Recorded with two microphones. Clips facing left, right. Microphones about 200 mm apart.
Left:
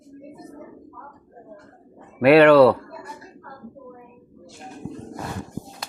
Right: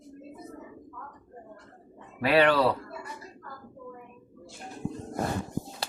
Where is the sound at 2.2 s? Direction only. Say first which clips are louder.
Left 10 dB; 65° left (ahead or behind).